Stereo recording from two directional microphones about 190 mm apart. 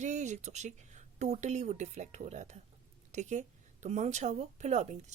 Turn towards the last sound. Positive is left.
turn(degrees=-40)  # may be behind; listen again after turning